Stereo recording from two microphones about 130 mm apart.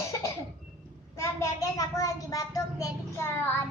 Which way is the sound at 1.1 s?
25° left (ahead or behind).